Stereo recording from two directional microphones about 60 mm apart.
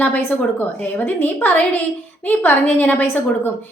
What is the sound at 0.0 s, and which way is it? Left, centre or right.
A woman's voice, left.